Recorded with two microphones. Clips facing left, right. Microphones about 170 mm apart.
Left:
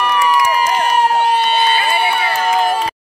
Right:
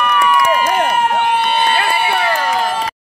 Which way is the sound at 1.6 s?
60° right (ahead or behind).